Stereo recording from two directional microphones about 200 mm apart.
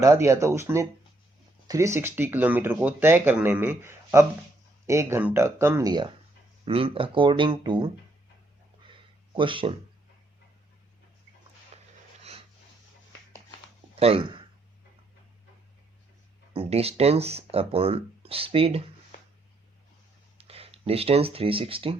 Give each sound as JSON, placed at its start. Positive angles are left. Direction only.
{"t": 0.0, "sound": "speech", "side_deg": -15}
{"t": 8.8, "sound": "a sound", "side_deg": -25}
{"t": 11.7, "sound": "a sound", "side_deg": -35}
{"t": 13.9, "sound": "speech", "side_deg": -30}
{"t": 16.6, "sound": "speech", "side_deg": -30}
{"t": 20.4, "sound": "speech", "side_deg": -30}